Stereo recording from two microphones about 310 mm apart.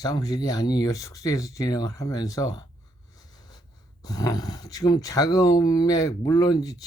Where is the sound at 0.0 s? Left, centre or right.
Centre.